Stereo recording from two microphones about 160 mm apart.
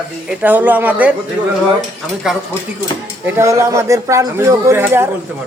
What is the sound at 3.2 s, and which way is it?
A man's voice, 20° right (ahead or behind).